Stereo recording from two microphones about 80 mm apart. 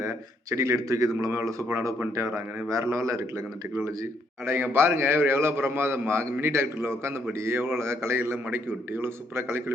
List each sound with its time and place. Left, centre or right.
0.0 s a man's voice: right
4.4 s a man's voice: right